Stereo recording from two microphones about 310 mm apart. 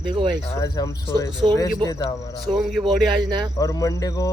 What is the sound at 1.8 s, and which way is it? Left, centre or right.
Speech, centre.